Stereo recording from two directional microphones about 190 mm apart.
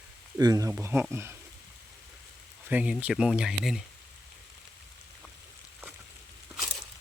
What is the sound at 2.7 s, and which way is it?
Speech, 5° right (ahead or behind).